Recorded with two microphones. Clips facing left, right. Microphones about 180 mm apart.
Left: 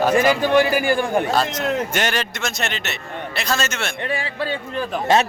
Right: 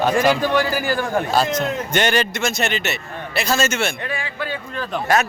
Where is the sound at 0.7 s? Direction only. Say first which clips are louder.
Left 3 dB; 15° left (ahead or behind).